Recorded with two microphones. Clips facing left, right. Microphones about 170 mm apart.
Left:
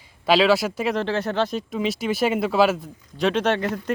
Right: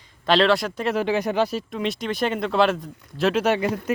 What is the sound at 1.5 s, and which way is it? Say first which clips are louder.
Speech: left 1 dB; centre (ahead or behind).